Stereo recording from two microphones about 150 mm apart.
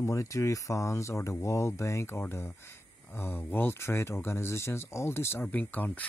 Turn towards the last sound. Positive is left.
turn(degrees=10)  # may be behind; listen again after turning